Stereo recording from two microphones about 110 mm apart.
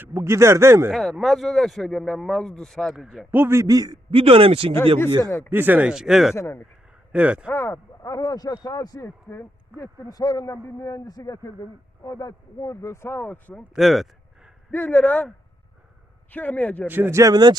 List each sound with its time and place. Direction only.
0.0 s speech: 25° right (ahead or behind)
1.2 s speech: centre (ahead or behind)
3.3 s speech: 20° right (ahead or behind)
4.1 s speech: 55° right (ahead or behind)
5.5 s speech: 20° right (ahead or behind)
5.9 s speech: 5° right (ahead or behind)
6.3 s speech: 25° left (ahead or behind)
7.1 s speech: 10° right (ahead or behind)
7.5 s speech: 20° left (ahead or behind)
8.1 s speech: 35° left (ahead or behind); by 13.6 s 20° left (ahead or behind)
13.7 s a sound: centre (ahead or behind)
14.7 s speech: 15° left (ahead or behind)
16.3 s speech: 15° left (ahead or behind)
16.9 s speech: 20° right (ahead or behind); by 17.6 s 40° right (ahead or behind)